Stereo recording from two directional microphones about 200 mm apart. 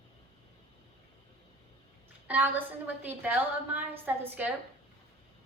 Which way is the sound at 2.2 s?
10° right (ahead or behind).